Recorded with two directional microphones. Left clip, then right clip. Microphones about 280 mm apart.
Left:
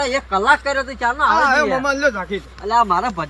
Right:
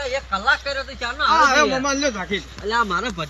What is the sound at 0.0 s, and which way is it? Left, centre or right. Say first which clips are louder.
Speech: left 4 dB; left.